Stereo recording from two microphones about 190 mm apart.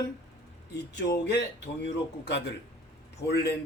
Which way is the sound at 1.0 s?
60° left (ahead or behind).